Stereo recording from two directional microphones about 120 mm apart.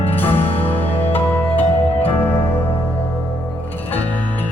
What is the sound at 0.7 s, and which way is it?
Music, 15° left (ahead or behind).